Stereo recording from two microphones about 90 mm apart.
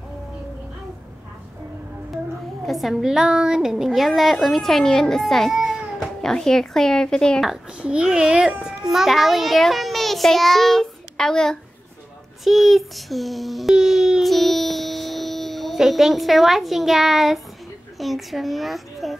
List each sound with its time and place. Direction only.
2.6 s a child's voice: centre (ahead or behind)
6.2 s speech: 5° left (ahead or behind)
7.4 s a child's voice: 10° right (ahead or behind); by 11.5 s 5° left (ahead or behind)
12.4 s child singing: centre (ahead or behind)
17.9 s speech: centre (ahead or behind)